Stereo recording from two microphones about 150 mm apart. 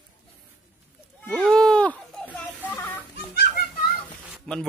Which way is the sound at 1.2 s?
10° left (ahead or behind).